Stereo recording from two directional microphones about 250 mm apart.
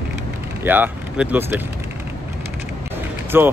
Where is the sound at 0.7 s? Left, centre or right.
Centre.